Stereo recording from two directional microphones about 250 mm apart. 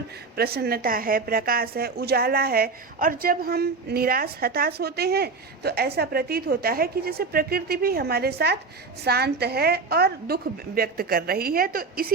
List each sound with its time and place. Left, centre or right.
0.3 s a woman's voice: right